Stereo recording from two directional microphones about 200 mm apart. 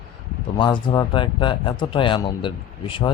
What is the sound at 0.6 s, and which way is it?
Speech, 25° left (ahead or behind).